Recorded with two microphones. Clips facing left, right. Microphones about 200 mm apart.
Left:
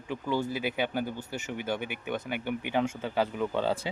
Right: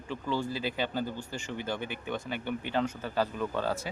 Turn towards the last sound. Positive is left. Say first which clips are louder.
# left 3 dB
turn(degrees=20)  # may be behind; listen again after turning